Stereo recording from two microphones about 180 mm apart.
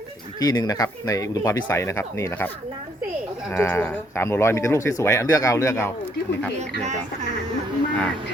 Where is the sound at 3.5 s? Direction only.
10° left (ahead or behind).